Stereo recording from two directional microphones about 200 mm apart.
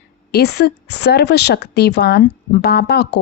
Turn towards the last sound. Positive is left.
turn(degrees=55)  # may be behind; listen again after turning